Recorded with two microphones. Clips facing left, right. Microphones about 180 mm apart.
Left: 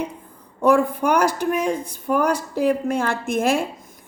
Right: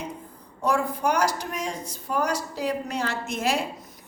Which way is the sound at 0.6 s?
55° left (ahead or behind).